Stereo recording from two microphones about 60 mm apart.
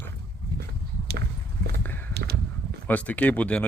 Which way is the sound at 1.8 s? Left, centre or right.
Left.